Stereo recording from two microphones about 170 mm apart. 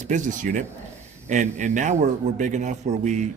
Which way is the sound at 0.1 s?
45° right (ahead or behind).